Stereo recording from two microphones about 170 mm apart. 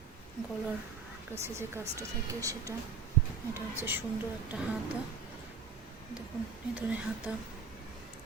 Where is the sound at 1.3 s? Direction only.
15° right (ahead or behind).